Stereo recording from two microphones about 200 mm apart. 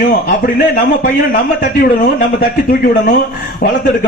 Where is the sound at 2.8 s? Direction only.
45° left (ahead or behind).